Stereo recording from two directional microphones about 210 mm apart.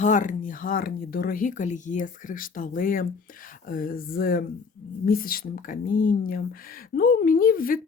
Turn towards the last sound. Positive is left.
turn(degrees=40)  # may be behind; listen again after turning